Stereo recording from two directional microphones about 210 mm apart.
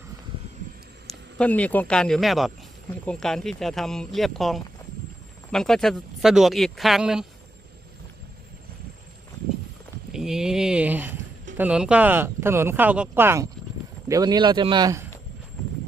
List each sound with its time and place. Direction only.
1.4 s speech: 5° left (ahead or behind)
10.1 s speech: 5° right (ahead or behind); by 15.0 s 20° right (ahead or behind)